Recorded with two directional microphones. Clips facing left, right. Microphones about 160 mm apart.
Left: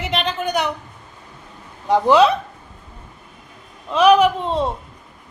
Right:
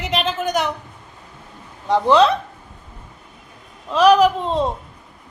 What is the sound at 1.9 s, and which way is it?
Speech, 10° left (ahead or behind).